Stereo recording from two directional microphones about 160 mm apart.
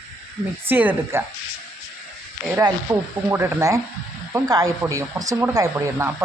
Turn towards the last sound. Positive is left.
turn(degrees=-20)  # may be behind; listen again after turning